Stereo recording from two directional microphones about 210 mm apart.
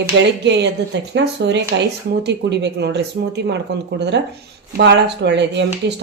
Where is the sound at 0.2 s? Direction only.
55° right (ahead or behind).